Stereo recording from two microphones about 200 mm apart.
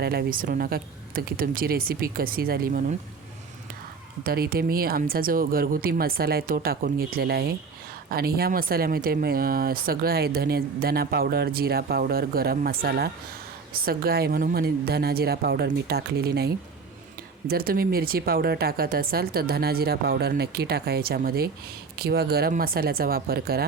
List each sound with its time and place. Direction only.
0.0 s speech: 50° right (ahead or behind)
4.2 s speech: 50° right (ahead or behind)
17.5 s speech: 50° right (ahead or behind)